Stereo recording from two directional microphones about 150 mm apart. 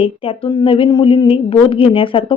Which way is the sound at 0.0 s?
35° left (ahead or behind).